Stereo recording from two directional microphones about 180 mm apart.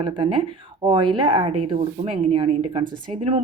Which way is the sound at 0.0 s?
25° right (ahead or behind).